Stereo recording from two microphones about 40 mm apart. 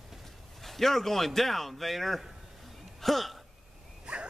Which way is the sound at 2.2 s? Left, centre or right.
Centre.